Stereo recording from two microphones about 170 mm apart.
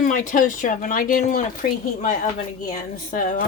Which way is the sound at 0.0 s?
50° left (ahead or behind).